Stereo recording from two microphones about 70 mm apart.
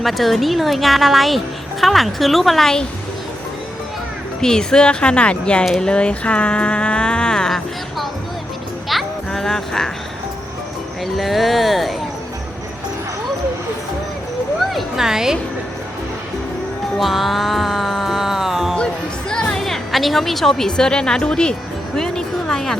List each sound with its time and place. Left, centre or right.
0.0 s speech: centre
4.4 s speech: centre
5.6 s speech: centre
5.9 s speech: centre
8.9 s music: centre
11.0 s speech: centre
14.7 s a sound: centre
17.0 s music: centre
19.3 s a woman's voice: centre
21.9 s a sound: centre